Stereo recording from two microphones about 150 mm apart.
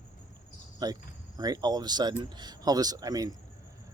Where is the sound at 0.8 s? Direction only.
25° right (ahead or behind).